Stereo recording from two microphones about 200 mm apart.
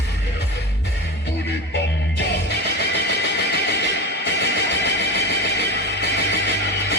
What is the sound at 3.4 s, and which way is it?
Neigh, 60° left (ahead or behind).